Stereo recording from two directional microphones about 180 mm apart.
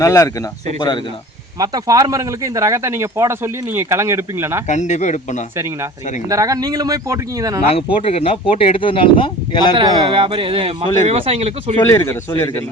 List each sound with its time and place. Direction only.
0.0 s speech: 15° left (ahead or behind)
1.5 s speech: 20° right (ahead or behind)
4.7 s speech: 40° left (ahead or behind)
5.5 s speech: 15° right (ahead or behind)
7.7 s speech: 30° left (ahead or behind)
10.1 s speech: 30° right (ahead or behind)
11.8 s a man's voice: 15° left (ahead or behind)